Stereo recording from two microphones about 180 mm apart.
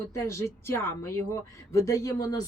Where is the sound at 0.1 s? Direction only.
15° left (ahead or behind).